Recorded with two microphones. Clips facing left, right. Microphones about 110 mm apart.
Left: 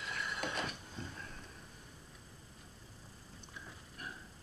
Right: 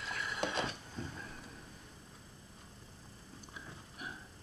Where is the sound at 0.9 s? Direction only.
5° right (ahead or behind).